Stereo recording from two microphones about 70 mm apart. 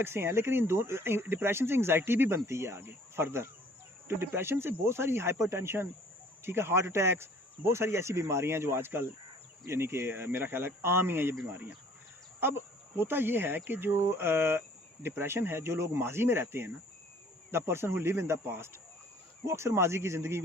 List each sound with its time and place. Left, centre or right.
0.0 s speech: right
12.4 s speech: right